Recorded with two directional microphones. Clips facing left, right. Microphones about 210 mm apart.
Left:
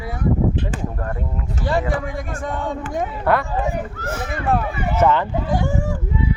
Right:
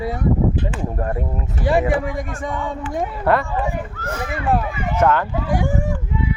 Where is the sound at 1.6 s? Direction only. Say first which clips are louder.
Right 4 dB; 15° right (ahead or behind).